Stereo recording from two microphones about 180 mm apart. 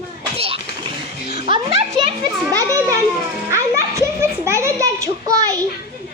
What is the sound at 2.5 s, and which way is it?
Children playing, 20° right (ahead or behind).